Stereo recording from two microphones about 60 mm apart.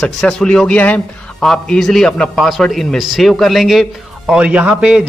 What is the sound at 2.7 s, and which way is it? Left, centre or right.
A man's voice, centre.